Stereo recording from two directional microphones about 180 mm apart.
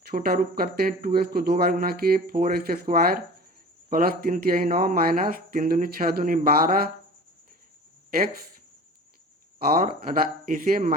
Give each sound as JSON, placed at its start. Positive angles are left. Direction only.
{"t": 0.1, "sound": "speech", "side_deg": -55}
{"t": 9.6, "sound": "speech", "side_deg": -55}